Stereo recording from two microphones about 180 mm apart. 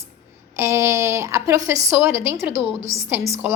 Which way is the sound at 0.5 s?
15° right (ahead or behind).